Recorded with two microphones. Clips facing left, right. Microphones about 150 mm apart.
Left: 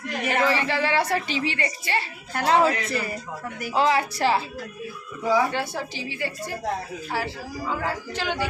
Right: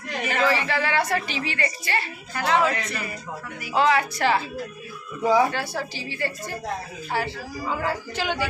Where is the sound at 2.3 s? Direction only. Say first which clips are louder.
Left 2 dB; 35° left (ahead or behind).